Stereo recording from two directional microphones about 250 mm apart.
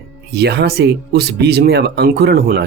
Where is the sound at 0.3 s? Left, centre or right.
Right.